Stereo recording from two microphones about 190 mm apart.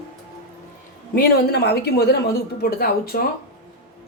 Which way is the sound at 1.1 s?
60° left (ahead or behind).